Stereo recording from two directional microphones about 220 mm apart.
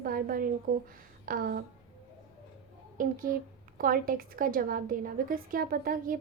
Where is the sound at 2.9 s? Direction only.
40° right (ahead or behind).